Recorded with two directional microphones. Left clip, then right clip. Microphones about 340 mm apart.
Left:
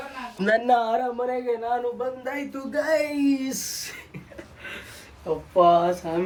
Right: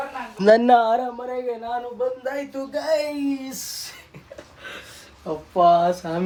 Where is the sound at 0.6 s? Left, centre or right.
Centre.